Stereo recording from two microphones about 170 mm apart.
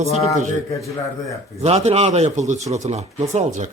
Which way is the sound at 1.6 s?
40° right (ahead or behind).